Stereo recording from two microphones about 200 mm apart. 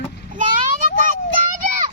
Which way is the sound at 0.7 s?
40° right (ahead or behind).